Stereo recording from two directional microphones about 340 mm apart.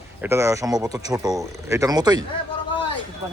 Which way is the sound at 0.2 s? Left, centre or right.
Centre.